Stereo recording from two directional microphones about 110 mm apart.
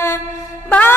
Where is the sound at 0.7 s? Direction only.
15° left (ahead or behind).